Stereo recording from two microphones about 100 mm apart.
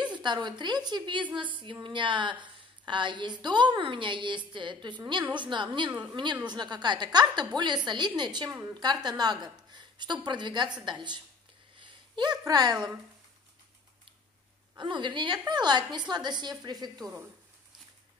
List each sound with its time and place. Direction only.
0.0 s a woman's voice: 50° right (ahead or behind)
11.8 s a sound: 45° right (ahead or behind)
14.8 s a woman's voice: 55° right (ahead or behind)